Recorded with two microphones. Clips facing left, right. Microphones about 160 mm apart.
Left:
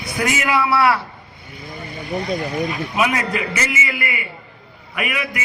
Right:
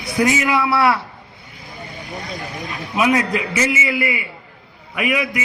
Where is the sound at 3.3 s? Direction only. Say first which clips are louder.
Right 3 dB; 25° right (ahead or behind).